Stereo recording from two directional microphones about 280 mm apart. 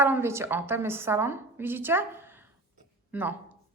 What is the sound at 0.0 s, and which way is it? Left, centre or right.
A woman's voice, centre.